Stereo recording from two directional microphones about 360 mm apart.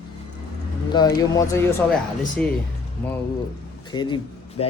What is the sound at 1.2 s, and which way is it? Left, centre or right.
Speech, centre.